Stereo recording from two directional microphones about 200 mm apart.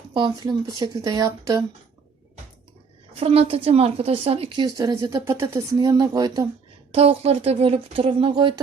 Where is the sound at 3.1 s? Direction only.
30° right (ahead or behind).